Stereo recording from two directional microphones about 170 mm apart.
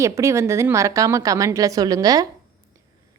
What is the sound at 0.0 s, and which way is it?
A woman's voice, 15° right (ahead or behind).